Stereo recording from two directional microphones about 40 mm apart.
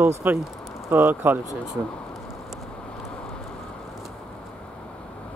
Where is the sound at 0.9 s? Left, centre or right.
Right.